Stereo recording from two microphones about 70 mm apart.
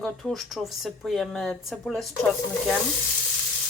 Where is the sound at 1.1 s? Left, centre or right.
Centre.